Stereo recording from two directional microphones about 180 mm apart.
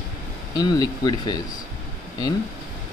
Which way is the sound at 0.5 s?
20° left (ahead or behind).